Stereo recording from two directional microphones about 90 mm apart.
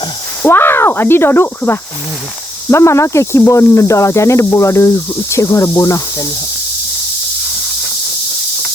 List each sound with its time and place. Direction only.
0.4 s speech: 25° left (ahead or behind)